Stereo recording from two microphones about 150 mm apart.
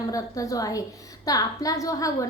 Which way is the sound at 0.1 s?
20° left (ahead or behind).